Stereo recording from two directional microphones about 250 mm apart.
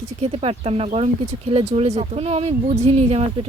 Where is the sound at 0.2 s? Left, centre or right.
Right.